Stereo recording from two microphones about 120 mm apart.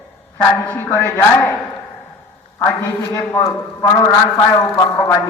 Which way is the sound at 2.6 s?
20° left (ahead or behind).